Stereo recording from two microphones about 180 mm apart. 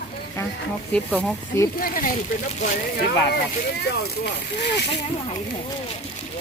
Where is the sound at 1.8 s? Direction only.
50° left (ahead or behind).